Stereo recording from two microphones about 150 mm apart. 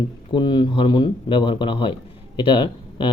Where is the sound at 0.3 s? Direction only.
30° left (ahead or behind).